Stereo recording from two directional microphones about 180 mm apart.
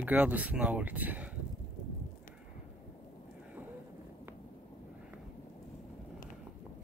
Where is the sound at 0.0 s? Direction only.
10° right (ahead or behind).